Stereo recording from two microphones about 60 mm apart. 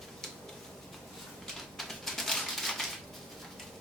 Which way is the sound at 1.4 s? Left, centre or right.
Centre.